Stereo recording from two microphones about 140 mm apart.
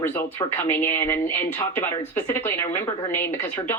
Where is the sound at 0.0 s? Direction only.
15° left (ahead or behind).